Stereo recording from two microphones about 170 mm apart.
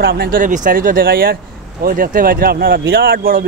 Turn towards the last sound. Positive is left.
turn(degrees=-60)  # may be behind; listen again after turning